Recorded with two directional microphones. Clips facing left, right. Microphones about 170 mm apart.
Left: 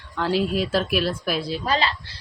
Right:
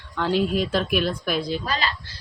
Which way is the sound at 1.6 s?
30° left (ahead or behind).